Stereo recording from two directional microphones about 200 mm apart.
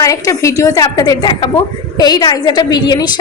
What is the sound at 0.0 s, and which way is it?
A woman's voice, 15° left (ahead or behind).